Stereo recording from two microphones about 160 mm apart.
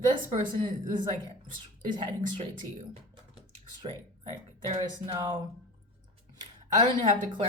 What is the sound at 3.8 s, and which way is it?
Speech, 35° right (ahead or behind).